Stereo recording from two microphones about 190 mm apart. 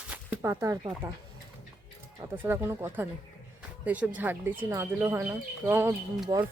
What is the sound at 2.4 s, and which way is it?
Speech, 10° right (ahead or behind).